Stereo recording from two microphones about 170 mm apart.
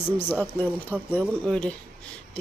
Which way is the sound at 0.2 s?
10° left (ahead or behind).